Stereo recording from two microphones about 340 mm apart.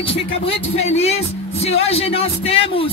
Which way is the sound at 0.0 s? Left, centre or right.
Centre.